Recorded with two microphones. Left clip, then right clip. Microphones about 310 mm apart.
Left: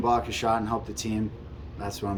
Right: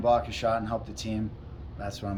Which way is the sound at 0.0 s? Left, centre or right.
Centre.